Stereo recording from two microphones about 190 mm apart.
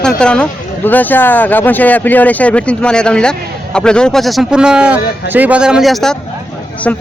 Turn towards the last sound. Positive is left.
turn(degrees=10)  # may be behind; listen again after turning